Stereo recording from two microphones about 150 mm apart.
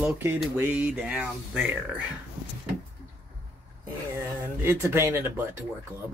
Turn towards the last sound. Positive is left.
turn(degrees=-15)  # may be behind; listen again after turning